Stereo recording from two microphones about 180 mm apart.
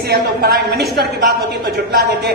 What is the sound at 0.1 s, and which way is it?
Speech, 60° right (ahead or behind).